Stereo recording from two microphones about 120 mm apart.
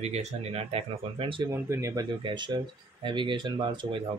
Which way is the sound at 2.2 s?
45° right (ahead or behind).